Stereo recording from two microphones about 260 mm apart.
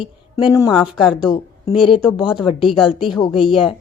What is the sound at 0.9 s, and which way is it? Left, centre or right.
A woman's voice, centre.